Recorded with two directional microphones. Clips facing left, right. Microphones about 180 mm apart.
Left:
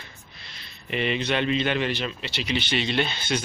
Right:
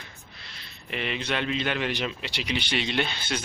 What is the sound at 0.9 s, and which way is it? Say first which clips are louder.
Speech: left 5 dB; centre (ahead or behind).